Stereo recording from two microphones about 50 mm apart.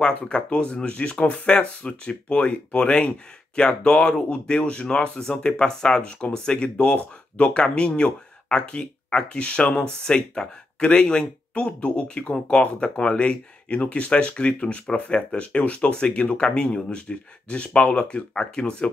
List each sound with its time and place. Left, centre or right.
0.0 s speech: left